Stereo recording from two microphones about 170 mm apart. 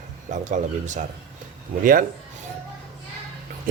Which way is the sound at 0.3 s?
45° right (ahead or behind).